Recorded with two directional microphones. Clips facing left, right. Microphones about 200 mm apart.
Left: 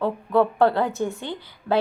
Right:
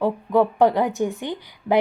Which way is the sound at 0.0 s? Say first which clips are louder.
Right 1 dB; 15° right (ahead or behind).